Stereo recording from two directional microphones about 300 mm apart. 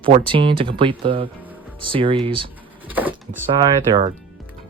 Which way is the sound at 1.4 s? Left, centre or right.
Centre.